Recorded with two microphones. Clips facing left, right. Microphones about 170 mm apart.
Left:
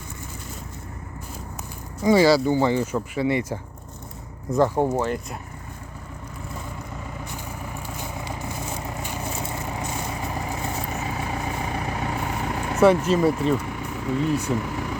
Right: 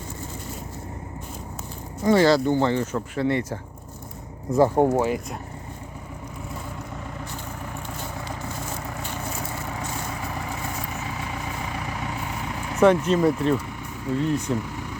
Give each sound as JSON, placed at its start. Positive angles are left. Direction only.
{"t": 2.0, "sound": "speech", "side_deg": 10}
{"t": 4.7, "sound": "speech", "side_deg": -15}
{"t": 7.2, "sound": "vehicle", "side_deg": 10}
{"t": 11.3, "sound": "vehicle", "side_deg": 50}
{"t": 12.8, "sound": "speech", "side_deg": 5}
{"t": 13.9, "sound": "speech", "side_deg": 80}
{"t": 14.6, "sound": "a sound", "side_deg": 85}